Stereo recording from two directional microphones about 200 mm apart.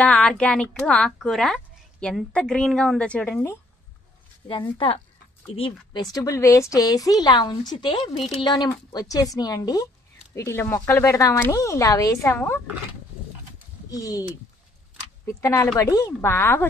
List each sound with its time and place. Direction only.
0.0 s speech: 5° left (ahead or behind)
4.5 s speech: 25° left (ahead or behind)
13.8 s speech: 15° left (ahead or behind)
15.2 s speech: 15° left (ahead or behind)